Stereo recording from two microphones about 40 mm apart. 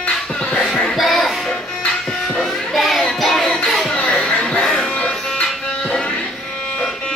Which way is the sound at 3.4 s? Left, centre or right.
Centre.